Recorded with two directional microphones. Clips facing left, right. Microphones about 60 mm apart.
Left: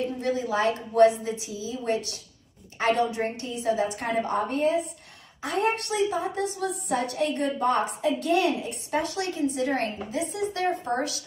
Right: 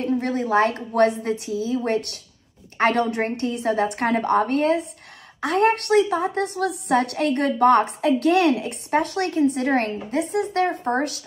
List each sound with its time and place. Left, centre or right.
0.0 s a woman's voice: right